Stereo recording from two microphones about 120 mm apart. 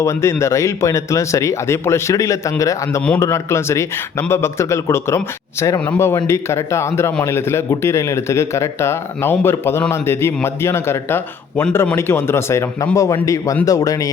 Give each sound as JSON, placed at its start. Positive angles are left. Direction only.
{"t": 0.0, "sound": "speech", "side_deg": 25}